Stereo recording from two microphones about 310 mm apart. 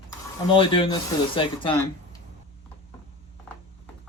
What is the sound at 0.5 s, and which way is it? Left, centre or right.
Speech, centre.